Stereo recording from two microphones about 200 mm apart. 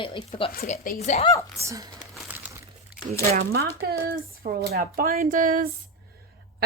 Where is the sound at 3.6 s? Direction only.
50° right (ahead or behind).